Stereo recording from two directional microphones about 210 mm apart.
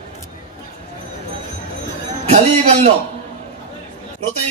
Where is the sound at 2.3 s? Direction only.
30° right (ahead or behind).